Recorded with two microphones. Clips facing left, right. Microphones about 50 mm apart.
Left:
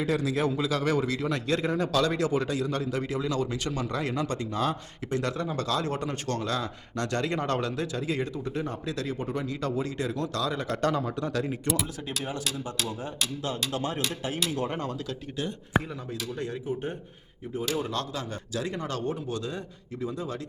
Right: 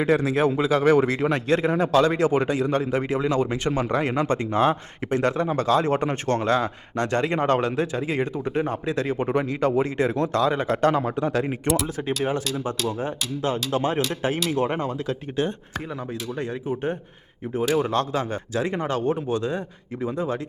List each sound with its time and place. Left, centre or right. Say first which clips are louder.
0.0 s speech: right 6 dB; right
16.4 s speech: right 5 dB; right